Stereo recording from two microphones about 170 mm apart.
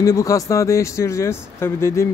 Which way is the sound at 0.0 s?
20° left (ahead or behind).